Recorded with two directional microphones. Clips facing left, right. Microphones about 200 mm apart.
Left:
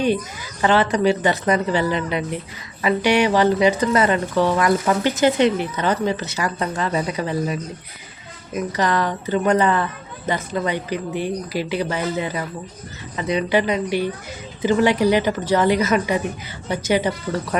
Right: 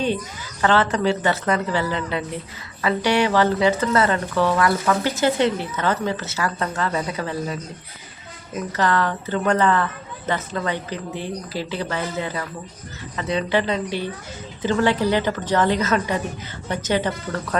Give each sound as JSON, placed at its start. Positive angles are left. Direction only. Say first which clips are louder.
{"t": 0.6, "sound": "speech", "louder": "left 2 dB", "side_deg": 15}